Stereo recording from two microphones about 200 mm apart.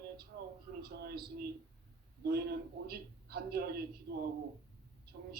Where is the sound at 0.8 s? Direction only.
50° right (ahead or behind).